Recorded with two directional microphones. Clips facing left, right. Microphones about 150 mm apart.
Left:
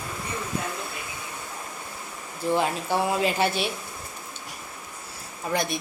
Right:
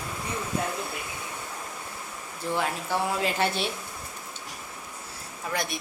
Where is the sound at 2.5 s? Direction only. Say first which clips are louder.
Left 4 dB; 15° left (ahead or behind).